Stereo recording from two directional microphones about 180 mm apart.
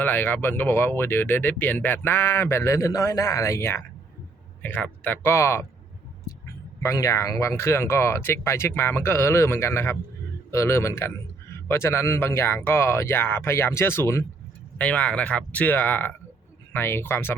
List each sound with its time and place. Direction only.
0.0 s speech: 10° left (ahead or behind)
6.8 s speech: 20° left (ahead or behind)